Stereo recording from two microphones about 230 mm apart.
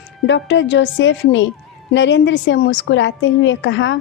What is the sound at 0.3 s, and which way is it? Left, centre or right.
A woman's voice, left.